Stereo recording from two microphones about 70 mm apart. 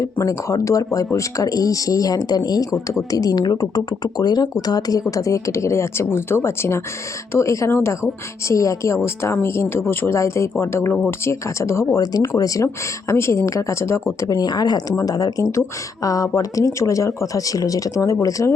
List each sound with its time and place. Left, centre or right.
0.0 s speech: left
2.8 s speech: left
8.4 s speech: left
9.4 s a woman's voice: left
14.3 s speech: left
16.0 s speech: left